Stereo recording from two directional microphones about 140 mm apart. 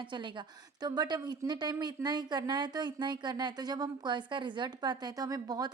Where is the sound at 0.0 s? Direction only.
35° right (ahead or behind).